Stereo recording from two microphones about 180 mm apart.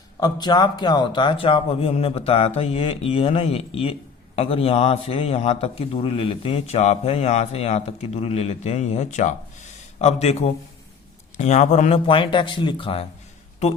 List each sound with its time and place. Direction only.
0.2 s a man's voice: 25° left (ahead or behind); by 11.9 s 40° left (ahead or behind)
12.0 s speech: 30° left (ahead or behind)